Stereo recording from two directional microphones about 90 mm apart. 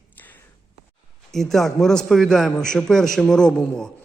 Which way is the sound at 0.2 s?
20° left (ahead or behind).